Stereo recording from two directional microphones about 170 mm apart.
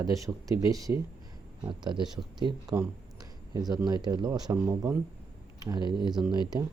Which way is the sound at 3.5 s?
25° right (ahead or behind).